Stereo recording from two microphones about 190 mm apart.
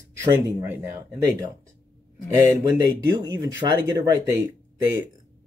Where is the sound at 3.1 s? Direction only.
20° right (ahead or behind).